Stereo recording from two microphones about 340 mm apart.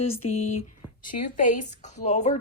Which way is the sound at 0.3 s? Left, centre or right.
Centre.